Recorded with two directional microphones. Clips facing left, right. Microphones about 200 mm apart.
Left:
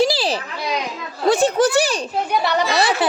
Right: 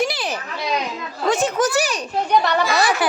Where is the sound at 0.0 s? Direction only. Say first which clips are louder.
Left 5 dB; 30° left (ahead or behind).